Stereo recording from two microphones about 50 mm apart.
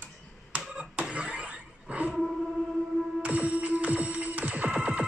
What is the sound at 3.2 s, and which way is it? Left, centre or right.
Music, right.